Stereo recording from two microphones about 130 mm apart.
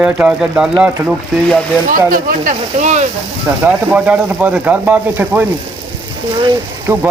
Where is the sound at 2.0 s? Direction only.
90° right; by 3.1 s 65° right (ahead or behind).